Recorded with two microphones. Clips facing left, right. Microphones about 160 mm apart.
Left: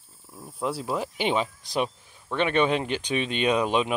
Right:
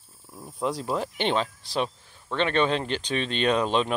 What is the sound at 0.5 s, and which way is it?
Speech, 5° left (ahead or behind).